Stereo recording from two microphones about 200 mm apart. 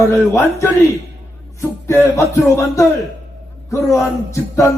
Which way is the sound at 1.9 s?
15° left (ahead or behind).